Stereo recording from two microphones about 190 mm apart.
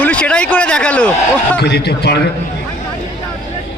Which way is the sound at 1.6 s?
60° left (ahead or behind).